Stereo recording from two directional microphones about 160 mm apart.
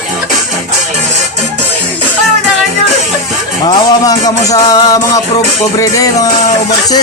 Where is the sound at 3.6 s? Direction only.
25° left (ahead or behind).